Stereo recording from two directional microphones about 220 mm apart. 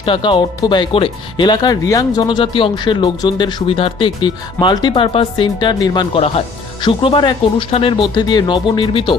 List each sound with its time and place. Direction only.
0.0 s speech: 20° left (ahead or behind)